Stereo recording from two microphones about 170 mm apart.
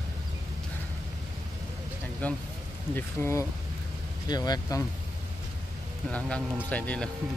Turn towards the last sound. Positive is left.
turn(degrees=10)  # may be behind; listen again after turning